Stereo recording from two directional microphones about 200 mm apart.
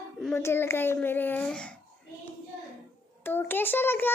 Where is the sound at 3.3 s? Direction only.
10° left (ahead or behind).